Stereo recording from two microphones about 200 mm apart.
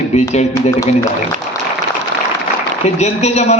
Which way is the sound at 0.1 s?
35° left (ahead or behind).